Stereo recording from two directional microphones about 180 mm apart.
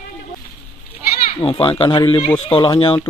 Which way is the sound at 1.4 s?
30° left (ahead or behind).